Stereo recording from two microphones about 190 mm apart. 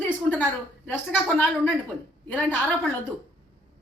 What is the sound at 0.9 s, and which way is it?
A woman's voice, 10° left (ahead or behind).